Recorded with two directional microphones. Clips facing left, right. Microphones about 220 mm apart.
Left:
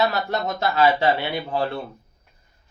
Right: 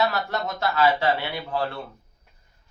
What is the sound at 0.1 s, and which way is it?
Speech, 20° left (ahead or behind).